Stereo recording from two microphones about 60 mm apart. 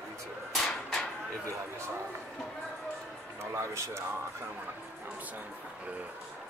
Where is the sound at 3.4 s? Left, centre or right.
Right.